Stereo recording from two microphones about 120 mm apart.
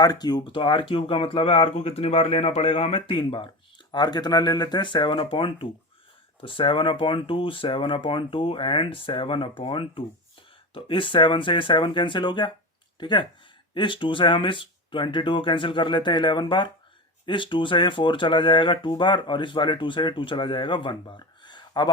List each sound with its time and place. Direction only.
0.0 s speech: 35° left (ahead or behind)